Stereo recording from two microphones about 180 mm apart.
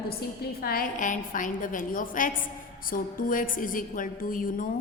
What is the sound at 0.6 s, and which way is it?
A woman's voice, 55° left (ahead or behind).